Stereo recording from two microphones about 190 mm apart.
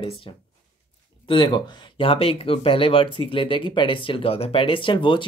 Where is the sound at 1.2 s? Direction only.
25° left (ahead or behind).